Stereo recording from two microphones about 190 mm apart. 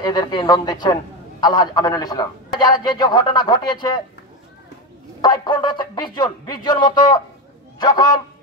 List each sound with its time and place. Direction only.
0.0 s a man's voice: 20° left (ahead or behind)
5.2 s a man's voice: 20° left (ahead or behind)